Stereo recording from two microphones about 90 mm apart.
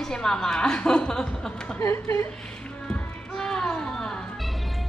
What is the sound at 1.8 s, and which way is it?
Speech, 30° left (ahead or behind).